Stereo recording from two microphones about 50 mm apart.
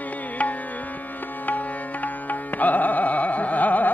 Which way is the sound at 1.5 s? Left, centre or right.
Left.